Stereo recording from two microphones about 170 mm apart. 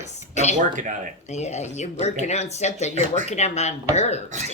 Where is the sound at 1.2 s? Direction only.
40° left (ahead or behind).